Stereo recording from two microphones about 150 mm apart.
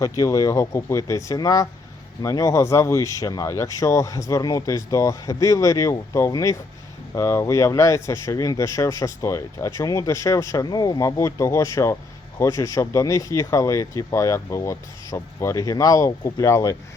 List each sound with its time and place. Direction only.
0.0 s speech: 20° left (ahead or behind)